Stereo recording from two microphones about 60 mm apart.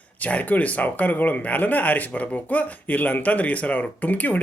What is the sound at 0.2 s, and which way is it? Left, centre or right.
Speech, left.